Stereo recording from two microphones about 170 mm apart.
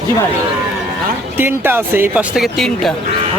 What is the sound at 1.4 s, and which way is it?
Speech, 10° right (ahead or behind).